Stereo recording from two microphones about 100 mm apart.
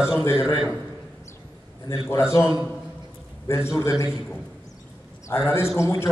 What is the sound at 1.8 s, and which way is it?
A man's voice, 30° left (ahead or behind).